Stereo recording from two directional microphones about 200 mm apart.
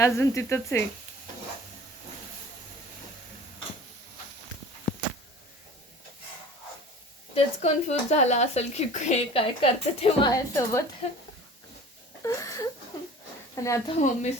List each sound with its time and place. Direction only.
0.0 s speech: 15° left (ahead or behind)
7.3 s speech: 35° left (ahead or behind)
10.3 s speech: 15° left (ahead or behind)
12.2 s wail: 15° left (ahead or behind)
13.6 s speech: 15° left (ahead or behind)
14.0 s speech: 35° left (ahead or behind)